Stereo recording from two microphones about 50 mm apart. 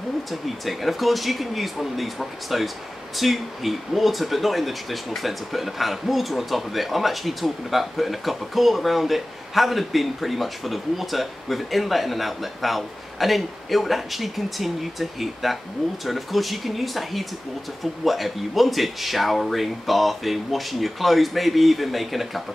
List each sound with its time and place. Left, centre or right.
0.3 s speech: centre